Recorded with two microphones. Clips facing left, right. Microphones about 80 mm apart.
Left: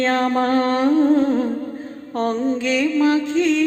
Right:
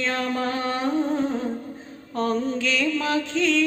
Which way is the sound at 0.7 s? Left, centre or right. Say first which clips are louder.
Left 8 dB; left.